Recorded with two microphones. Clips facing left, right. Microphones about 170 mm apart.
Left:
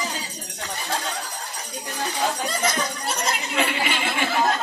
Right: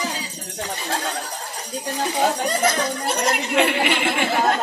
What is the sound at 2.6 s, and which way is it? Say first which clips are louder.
Speech: right 3 dB; 60° right (ahead or behind).